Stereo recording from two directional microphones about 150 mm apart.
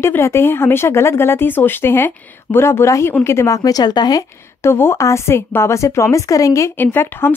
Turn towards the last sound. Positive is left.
turn(degrees=15)  # may be behind; listen again after turning